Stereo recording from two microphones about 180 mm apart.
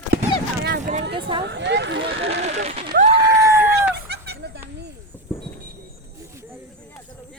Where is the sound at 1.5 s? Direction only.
75° right (ahead or behind).